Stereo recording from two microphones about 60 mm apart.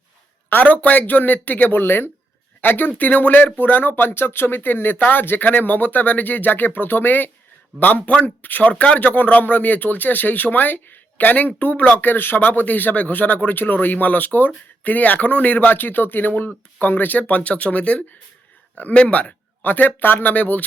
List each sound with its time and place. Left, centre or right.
0.5 s speech: left